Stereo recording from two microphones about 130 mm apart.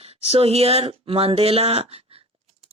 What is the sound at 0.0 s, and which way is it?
Speech, 50° right (ahead or behind).